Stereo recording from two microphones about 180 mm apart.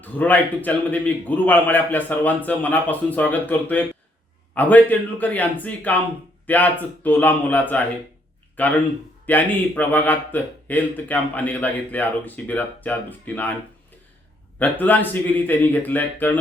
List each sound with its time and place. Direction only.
0.0 s speech: 10° left (ahead or behind)
14.6 s speech: 10° left (ahead or behind)